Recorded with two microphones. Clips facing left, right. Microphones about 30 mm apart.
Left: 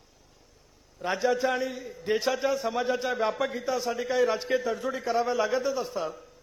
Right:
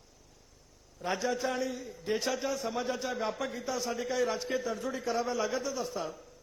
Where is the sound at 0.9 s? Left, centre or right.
Centre.